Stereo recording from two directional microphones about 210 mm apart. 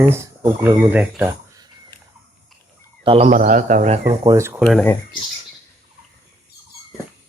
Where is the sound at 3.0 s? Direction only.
25° right (ahead or behind).